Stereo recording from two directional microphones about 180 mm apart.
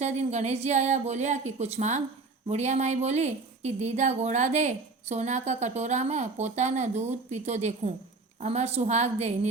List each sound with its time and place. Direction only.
0.0 s a woman's voice: 40° right (ahead or behind)